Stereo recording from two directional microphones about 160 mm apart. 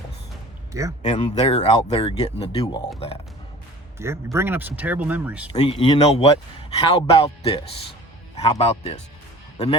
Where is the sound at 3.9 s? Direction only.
15° right (ahead or behind).